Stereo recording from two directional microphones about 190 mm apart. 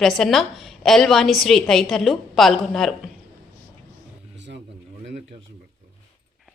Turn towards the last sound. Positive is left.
turn(degrees=-70)  # may be behind; listen again after turning